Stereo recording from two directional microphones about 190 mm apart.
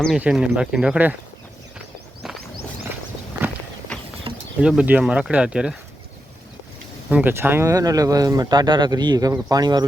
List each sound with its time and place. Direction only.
0.0 s speech: 5° right (ahead or behind)
4.3 s a sound: 30° right (ahead or behind)
4.6 s speech: 5° right (ahead or behind)
7.1 s speech: 10° right (ahead or behind)